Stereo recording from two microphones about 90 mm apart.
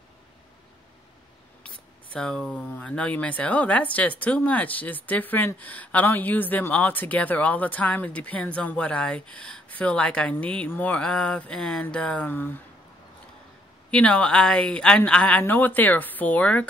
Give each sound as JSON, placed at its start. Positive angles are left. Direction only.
{"t": 2.1, "sound": "a woman's voice", "side_deg": 10}
{"t": 13.8, "sound": "a woman's voice", "side_deg": 15}